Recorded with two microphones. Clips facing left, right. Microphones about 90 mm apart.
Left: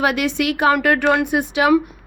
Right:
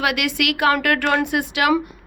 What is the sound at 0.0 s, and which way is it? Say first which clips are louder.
A woman's voice: left 3 dB; 30° left (ahead or behind).